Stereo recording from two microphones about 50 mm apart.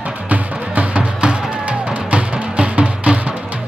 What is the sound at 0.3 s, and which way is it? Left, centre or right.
Music, right.